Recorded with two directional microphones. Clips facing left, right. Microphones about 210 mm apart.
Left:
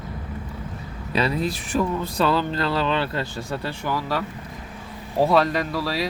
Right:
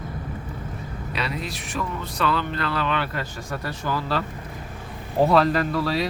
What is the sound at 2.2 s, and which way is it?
Speech, 35° left (ahead or behind).